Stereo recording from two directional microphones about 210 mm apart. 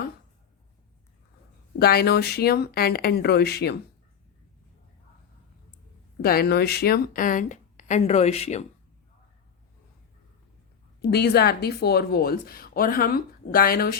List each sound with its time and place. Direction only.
1.8 s a woman's voice: 50° left (ahead or behind)
6.2 s speech: 45° left (ahead or behind); by 8.6 s 30° left (ahead or behind)
11.1 s a woman's voice: 50° left (ahead or behind)